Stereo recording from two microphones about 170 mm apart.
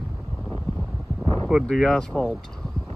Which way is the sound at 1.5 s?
5° left (ahead or behind).